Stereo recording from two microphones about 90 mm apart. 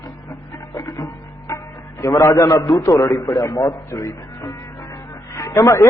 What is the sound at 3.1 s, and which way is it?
A man's voice, 40° left (ahead or behind).